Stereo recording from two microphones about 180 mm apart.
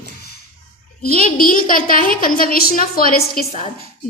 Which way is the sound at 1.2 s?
50° left (ahead or behind).